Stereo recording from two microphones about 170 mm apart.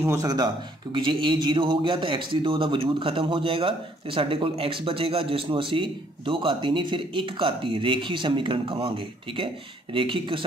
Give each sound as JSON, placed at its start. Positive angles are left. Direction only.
{"t": 0.0, "sound": "a man's voice", "side_deg": -15}